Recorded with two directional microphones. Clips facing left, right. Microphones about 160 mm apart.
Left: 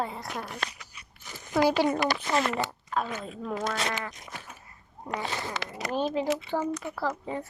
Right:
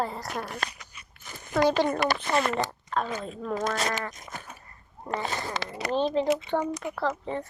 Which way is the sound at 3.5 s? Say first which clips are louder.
Right 2 dB; 45° right (ahead or behind).